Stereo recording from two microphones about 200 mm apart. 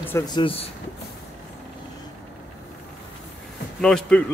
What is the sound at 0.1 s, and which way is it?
Speech, 25° left (ahead or behind).